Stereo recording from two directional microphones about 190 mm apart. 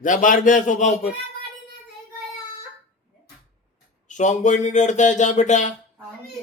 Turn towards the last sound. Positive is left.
turn(degrees=40)  # may be behind; listen again after turning